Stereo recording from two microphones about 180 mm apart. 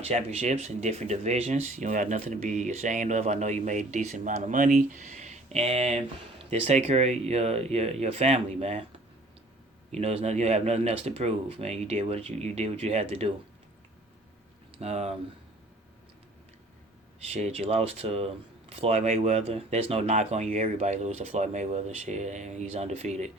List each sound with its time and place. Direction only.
0.0 s speech: 35° right (ahead or behind)
9.9 s speech: 35° right (ahead or behind)
14.8 s speech: 35° right (ahead or behind)
17.3 s speech: 35° right (ahead or behind)